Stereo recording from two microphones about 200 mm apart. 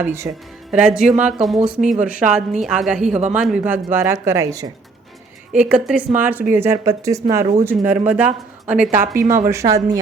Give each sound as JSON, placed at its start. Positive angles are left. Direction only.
{"t": 0.0, "sound": "a woman's voice", "side_deg": -10}